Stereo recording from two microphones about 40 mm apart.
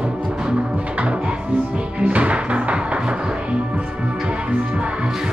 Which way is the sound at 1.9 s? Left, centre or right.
Right.